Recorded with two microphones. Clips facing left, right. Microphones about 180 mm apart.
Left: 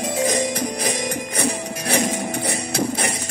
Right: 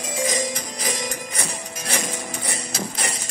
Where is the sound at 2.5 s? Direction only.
65° left (ahead or behind).